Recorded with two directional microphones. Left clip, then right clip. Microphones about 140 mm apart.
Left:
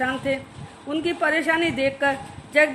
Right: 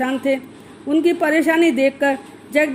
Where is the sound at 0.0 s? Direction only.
45° right (ahead or behind).